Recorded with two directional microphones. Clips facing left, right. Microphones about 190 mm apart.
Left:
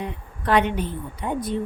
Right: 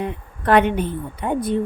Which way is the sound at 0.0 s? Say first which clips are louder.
Right 5 dB; 55° right (ahead or behind).